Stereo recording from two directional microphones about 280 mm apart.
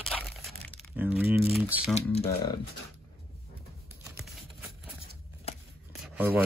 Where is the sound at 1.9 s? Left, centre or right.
Left.